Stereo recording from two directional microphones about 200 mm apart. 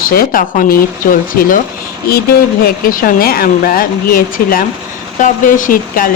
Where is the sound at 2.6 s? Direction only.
45° left (ahead or behind).